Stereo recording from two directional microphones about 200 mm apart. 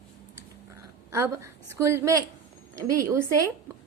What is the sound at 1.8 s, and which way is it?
A woman's voice, 15° right (ahead or behind).